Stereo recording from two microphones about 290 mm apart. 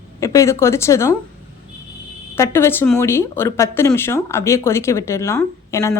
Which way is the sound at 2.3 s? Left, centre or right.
Centre.